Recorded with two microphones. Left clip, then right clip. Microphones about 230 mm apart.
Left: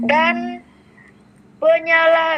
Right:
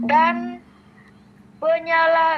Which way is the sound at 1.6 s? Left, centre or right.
Centre.